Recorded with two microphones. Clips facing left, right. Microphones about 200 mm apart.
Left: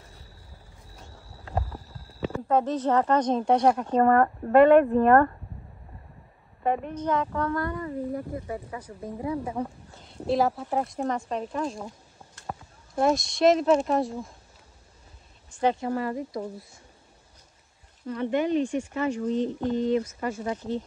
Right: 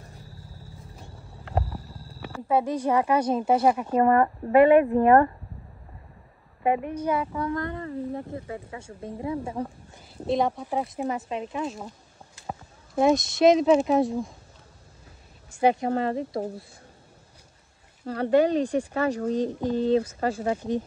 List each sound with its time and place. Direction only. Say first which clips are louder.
0.9 s clip-clop: right 2 dB; 10° right (ahead or behind)
2.4 s speech: right 1 dB; 10° right (ahead or behind)
6.6 s speech: right 2 dB; 10° right (ahead or behind)
9.6 s speech: even; 10° right (ahead or behind)
15.5 s a woman's voice: right 3 dB; 15° right (ahead or behind)
15.9 s speech: right 3 dB; 25° right (ahead or behind)
18.0 s speech: right 5 dB; 35° right (ahead or behind)